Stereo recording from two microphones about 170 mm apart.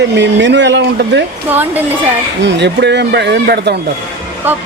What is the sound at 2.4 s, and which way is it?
Speech, 90° right.